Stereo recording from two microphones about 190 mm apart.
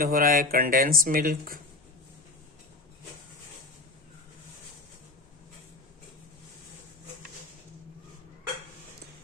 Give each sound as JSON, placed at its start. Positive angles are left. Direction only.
{"t": 0.0, "sound": "speech", "side_deg": -50}